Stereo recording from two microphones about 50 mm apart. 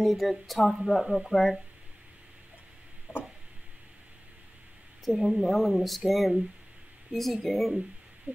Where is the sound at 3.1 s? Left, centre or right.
Left.